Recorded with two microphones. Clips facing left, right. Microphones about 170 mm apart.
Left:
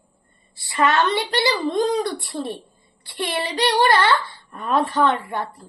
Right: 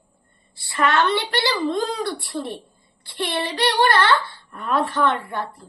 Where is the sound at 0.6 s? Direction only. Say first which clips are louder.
Left 1 dB; 15° left (ahead or behind).